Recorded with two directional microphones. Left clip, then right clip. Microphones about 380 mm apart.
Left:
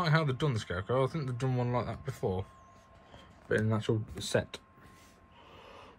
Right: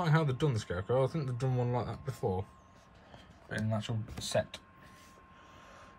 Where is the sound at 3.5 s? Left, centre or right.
Centre.